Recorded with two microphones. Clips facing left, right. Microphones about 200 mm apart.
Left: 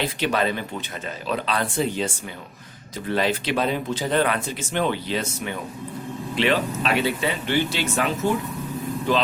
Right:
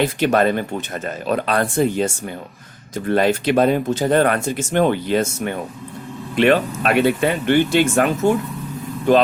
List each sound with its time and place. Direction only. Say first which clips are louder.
0.0 s speech: right 7 dB; 50° right (ahead or behind)